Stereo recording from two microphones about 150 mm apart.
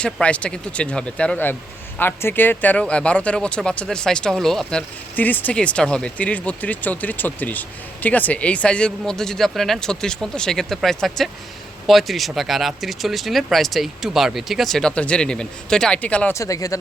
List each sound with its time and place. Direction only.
0.0 s speech: 10° left (ahead or behind)
16.3 s speech: 20° left (ahead or behind)